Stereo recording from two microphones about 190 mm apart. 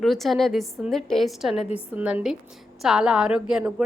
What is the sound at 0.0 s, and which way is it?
A woman's voice, centre (ahead or behind).